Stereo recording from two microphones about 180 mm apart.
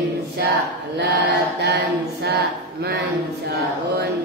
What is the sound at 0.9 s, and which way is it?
Mantra, 65° right (ahead or behind).